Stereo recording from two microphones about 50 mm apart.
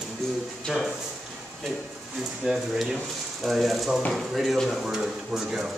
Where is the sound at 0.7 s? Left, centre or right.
Centre.